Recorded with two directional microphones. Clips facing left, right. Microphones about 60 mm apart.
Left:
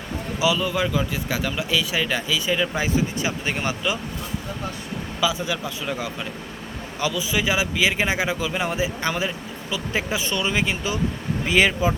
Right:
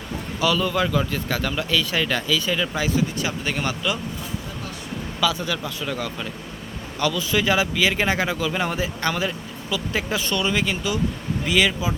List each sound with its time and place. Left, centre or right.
0.3 s speech: centre
5.2 s speech: centre